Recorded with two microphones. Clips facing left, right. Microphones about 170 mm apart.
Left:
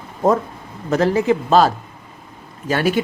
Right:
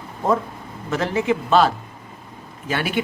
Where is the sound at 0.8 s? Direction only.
40° left (ahead or behind).